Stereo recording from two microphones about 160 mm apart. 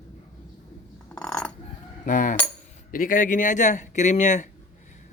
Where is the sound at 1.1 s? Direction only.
5° left (ahead or behind).